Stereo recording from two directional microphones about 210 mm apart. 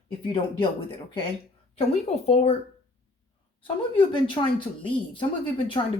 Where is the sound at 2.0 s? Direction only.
30° left (ahead or behind).